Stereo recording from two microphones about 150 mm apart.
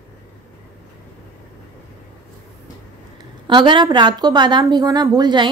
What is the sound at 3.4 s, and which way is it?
A woman's voice, 30° right (ahead or behind).